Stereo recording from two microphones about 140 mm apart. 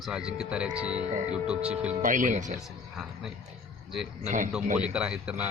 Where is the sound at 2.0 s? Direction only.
70° right (ahead or behind).